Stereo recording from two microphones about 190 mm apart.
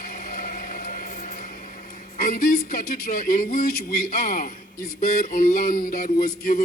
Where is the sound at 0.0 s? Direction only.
50° left (ahead or behind).